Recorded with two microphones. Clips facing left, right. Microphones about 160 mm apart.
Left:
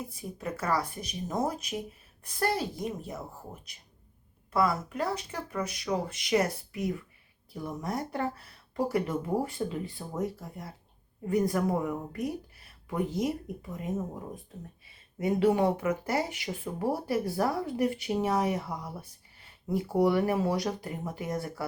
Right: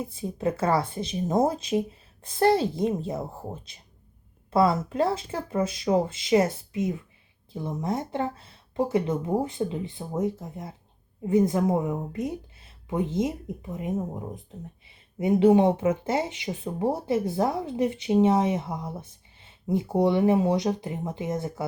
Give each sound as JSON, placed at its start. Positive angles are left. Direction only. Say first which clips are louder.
{"t": 0.0, "sound": "speech", "louder": "right 9 dB", "side_deg": -25}